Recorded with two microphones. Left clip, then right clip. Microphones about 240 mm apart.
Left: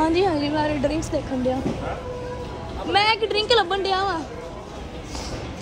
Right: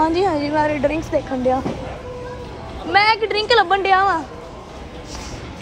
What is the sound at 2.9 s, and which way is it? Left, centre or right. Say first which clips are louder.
Speech: right 4 dB; centre.